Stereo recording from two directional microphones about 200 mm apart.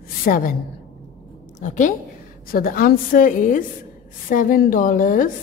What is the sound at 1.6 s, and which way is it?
A woman's voice, 40° left (ahead or behind).